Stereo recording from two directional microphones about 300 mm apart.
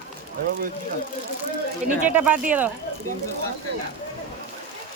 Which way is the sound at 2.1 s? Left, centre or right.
Centre.